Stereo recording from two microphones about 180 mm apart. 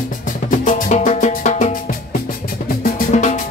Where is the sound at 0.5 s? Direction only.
45° left (ahead or behind).